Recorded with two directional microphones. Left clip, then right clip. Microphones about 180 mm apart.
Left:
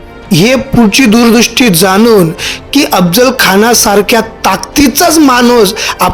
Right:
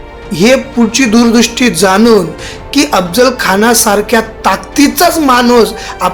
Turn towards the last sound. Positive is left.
turn(degrees=45)  # may be behind; listen again after turning